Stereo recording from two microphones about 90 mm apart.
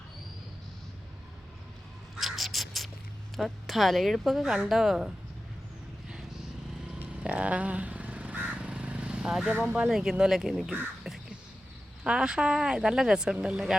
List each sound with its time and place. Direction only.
2.1 s a sound: centre (ahead or behind)
3.3 s a woman's voice: centre (ahead or behind)
7.0 s crow: 15° right (ahead or behind)
9.6 s speech: 15° right (ahead or behind)
9.9 s a woman's voice: 5° right (ahead or behind)